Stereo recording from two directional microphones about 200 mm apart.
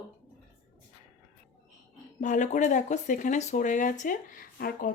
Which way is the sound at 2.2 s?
40° left (ahead or behind).